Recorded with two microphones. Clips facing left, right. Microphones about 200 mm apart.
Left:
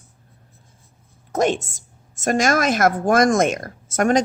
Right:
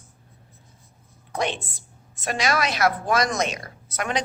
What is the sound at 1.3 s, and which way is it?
A woman's voice, 45° left (ahead or behind).